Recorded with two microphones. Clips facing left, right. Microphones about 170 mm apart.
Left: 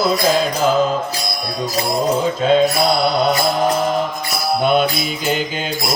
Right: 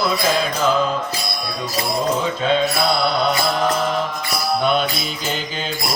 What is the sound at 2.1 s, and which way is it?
Mantra, 40° left (ahead or behind).